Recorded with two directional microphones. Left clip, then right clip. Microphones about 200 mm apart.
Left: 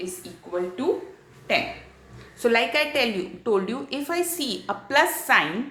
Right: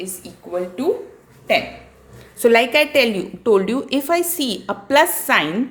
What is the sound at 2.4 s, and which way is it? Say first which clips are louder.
A woman's voice: right 7 dB; 40° right (ahead or behind).